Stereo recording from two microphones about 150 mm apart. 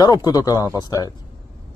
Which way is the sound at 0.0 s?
25° left (ahead or behind).